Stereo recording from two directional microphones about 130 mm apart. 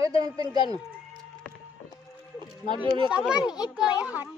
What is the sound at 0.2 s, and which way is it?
Speech, 30° right (ahead or behind).